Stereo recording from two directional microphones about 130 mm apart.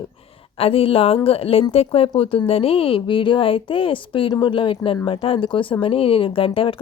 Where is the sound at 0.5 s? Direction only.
45° left (ahead or behind).